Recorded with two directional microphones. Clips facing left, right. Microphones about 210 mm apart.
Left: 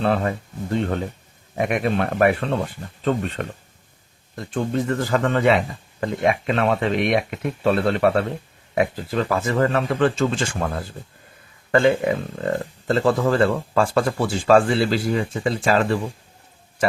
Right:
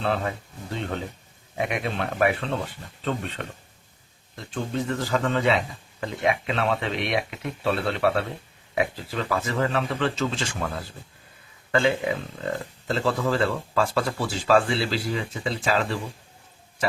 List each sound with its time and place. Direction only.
0.0 s speech: 50° left (ahead or behind)
1.5 s speech: 50° left (ahead or behind)